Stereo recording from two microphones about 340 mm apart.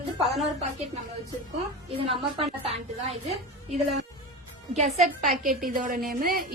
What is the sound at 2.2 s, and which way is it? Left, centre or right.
A woman's voice, centre.